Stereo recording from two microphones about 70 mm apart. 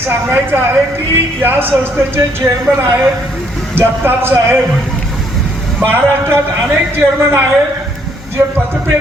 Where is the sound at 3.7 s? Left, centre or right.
Right.